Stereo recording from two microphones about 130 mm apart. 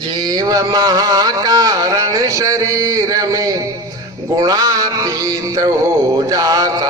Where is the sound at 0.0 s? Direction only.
35° right (ahead or behind).